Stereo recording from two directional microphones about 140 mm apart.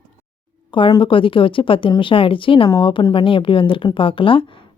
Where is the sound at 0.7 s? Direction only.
35° left (ahead or behind).